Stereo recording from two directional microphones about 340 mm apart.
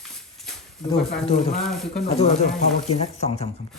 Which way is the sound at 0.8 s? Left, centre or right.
Centre.